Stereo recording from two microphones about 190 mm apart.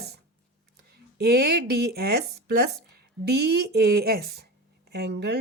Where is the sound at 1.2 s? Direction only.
55° right (ahead or behind).